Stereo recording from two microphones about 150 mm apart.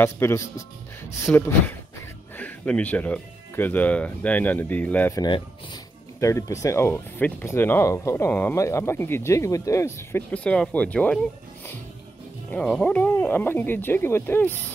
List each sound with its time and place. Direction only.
0.0 s speech: 15° left (ahead or behind)
5.1 s speech: 25° left (ahead or behind); by 11.1 s 10° left (ahead or behind)
12.4 s speech: 10° left (ahead or behind)